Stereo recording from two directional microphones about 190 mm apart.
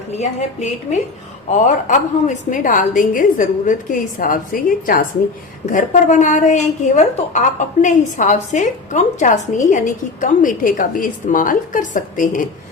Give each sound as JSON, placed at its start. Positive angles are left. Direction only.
{"t": 0.2, "sound": "a woman's voice", "side_deg": 35}